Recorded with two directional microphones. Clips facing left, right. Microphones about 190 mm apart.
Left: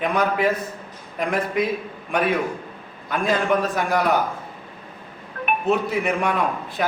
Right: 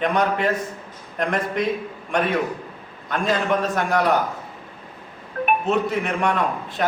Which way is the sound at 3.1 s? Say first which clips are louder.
Left 1 dB; 5° left (ahead or behind).